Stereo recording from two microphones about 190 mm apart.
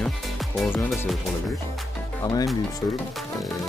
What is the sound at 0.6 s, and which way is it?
Speech, centre (ahead or behind).